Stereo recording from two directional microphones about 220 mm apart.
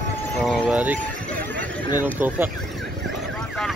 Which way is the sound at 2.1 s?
10° right (ahead or behind).